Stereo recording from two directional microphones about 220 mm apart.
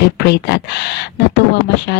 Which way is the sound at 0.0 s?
50° left (ahead or behind).